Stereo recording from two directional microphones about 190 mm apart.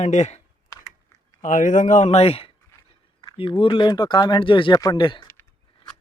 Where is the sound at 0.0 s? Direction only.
35° left (ahead or behind).